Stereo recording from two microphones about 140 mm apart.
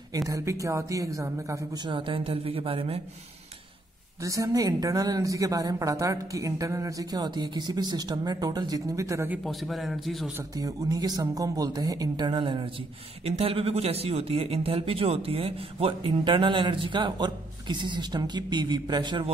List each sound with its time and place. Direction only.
0.3 s speech: 20° right (ahead or behind)
1.9 s speech: 35° right (ahead or behind)
4.2 s speech: 25° right (ahead or behind)
9.4 s a man's voice: centre (ahead or behind)
10.3 s speech: 25° right (ahead or behind)
13.2 s speech: 45° right (ahead or behind)